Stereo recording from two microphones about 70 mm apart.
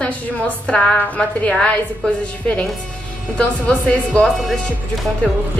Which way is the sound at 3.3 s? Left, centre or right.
Centre.